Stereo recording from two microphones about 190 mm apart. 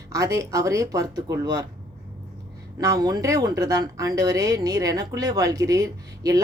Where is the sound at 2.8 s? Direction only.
20° right (ahead or behind).